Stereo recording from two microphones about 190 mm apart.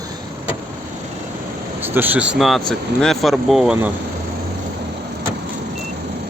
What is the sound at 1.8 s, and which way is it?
Speech, 10° right (ahead or behind).